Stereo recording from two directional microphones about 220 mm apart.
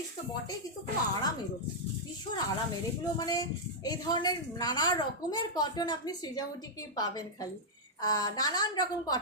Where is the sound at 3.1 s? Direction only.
15° left (ahead or behind).